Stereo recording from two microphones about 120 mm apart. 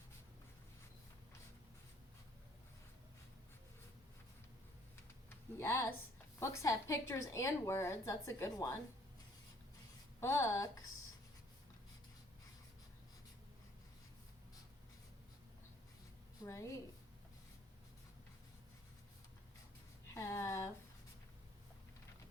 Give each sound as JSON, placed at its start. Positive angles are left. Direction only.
{"t": 5.5, "sound": "a woman's voice", "side_deg": 20}
{"t": 10.2, "sound": "a woman's voice", "side_deg": 20}
{"t": 16.4, "sound": "a woman's voice", "side_deg": 25}
{"t": 20.1, "sound": "a sound", "side_deg": 20}